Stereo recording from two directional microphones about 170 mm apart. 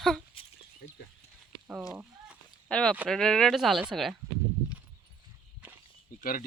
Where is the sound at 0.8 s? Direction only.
65° left (ahead or behind).